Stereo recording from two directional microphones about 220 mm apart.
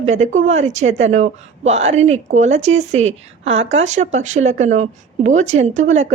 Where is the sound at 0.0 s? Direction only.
30° right (ahead or behind).